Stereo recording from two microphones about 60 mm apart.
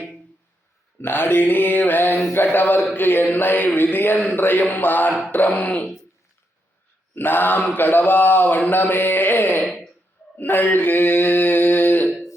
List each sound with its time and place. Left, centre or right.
1.0 s mantra: left
5.3 s speech: left
7.2 s mantra: left